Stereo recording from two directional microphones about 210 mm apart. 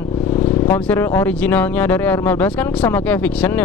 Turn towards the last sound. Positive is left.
turn(degrees=5)  # may be behind; listen again after turning